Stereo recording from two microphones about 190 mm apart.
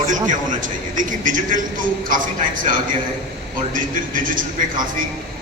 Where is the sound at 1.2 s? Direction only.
45° right (ahead or behind).